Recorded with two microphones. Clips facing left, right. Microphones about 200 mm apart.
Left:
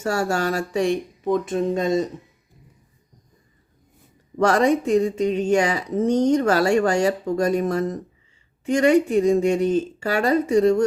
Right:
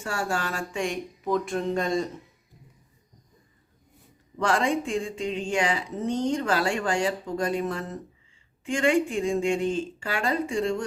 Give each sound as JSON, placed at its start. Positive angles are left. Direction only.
{"t": 0.0, "sound": "speech", "side_deg": 40}
{"t": 1.2, "sound": "speech", "side_deg": 20}
{"t": 4.4, "sound": "speech", "side_deg": 40}